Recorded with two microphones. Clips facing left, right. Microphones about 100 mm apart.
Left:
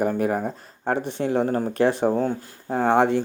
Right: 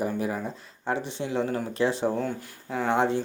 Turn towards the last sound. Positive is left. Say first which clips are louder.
# left 5 dB
turn(degrees=55)  # may be behind; listen again after turning